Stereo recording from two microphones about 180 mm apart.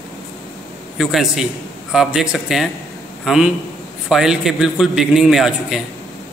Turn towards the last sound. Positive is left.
turn(degrees=0)  # may be behind; listen again after turning